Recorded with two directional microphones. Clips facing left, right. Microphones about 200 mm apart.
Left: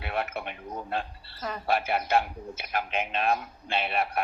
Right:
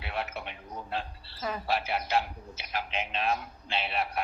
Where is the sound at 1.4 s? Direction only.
Centre (ahead or behind).